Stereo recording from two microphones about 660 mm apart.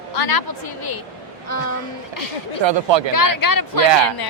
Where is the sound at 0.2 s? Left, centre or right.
Left.